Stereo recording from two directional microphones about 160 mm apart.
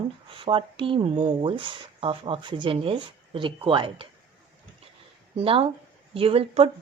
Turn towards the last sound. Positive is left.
turn(degrees=-40)  # may be behind; listen again after turning